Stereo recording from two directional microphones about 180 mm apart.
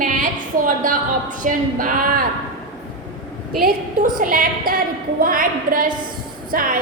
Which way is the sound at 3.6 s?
50° right (ahead or behind).